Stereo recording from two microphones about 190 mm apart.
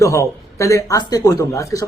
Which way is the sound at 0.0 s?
15° left (ahead or behind).